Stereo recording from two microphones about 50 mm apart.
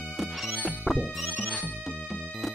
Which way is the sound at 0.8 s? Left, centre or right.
Right.